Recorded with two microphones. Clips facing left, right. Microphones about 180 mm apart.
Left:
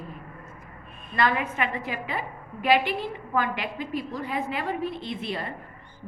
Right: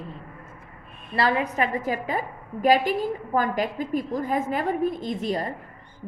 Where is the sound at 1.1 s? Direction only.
35° right (ahead or behind).